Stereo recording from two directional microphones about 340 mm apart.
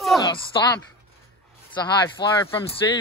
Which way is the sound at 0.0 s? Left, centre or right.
Centre.